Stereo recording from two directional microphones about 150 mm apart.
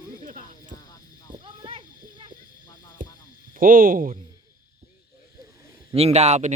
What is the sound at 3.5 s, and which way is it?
Speech, 65° right (ahead or behind).